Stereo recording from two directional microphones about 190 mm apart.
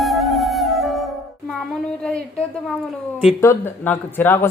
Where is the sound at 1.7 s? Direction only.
5° left (ahead or behind).